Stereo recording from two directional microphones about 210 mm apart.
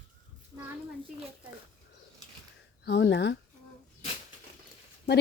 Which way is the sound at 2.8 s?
55° left (ahead or behind).